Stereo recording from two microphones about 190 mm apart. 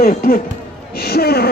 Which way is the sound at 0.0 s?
50° left (ahead or behind).